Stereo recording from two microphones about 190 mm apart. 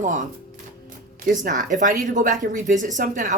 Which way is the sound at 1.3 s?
40° right (ahead or behind).